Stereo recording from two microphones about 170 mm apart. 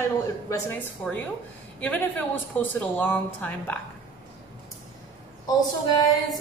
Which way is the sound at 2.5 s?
10° left (ahead or behind).